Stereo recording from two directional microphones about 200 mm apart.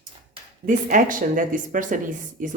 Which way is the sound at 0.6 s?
40° right (ahead or behind).